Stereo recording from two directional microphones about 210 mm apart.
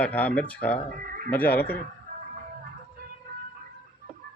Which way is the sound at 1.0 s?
40° right (ahead or behind).